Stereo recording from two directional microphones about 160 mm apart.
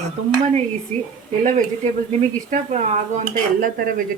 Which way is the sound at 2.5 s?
45° right (ahead or behind).